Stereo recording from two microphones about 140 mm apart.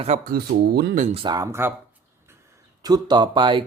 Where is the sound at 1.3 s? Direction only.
20° right (ahead or behind).